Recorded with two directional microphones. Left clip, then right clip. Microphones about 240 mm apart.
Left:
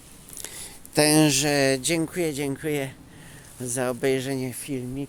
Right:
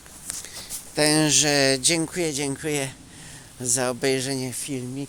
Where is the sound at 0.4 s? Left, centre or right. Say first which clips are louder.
Right 3 dB; left.